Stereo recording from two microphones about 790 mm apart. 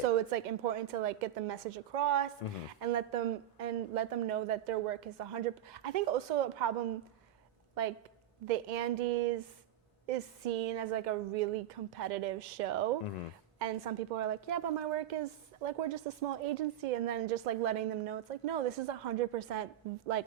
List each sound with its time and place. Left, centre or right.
0.0 s a woman's voice: right
7.8 s a woman's voice: right